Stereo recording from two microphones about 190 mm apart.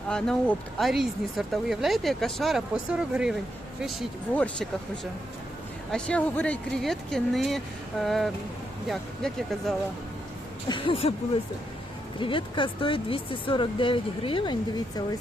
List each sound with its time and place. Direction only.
0.1 s speech: 5° left (ahead or behind)
5.9 s speech: 5° left (ahead or behind)
10.7 s speech: 25° left (ahead or behind)
12.2 s speech: 25° left (ahead or behind)